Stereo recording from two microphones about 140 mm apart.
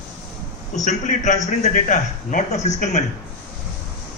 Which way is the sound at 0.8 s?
60° left (ahead or behind).